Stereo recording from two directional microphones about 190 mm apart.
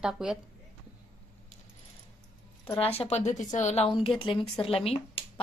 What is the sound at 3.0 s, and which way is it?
Speech, 35° left (ahead or behind).